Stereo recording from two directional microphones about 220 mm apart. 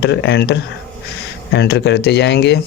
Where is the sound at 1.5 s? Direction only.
50° left (ahead or behind).